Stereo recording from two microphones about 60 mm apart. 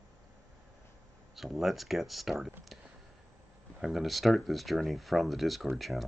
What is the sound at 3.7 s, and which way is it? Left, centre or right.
Speech, centre.